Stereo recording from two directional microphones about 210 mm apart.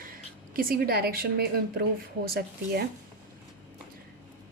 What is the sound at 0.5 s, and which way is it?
Speech, 45° right (ahead or behind).